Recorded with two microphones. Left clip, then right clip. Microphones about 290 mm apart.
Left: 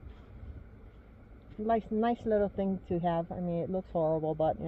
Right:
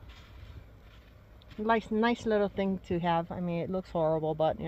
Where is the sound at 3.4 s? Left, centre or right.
Right.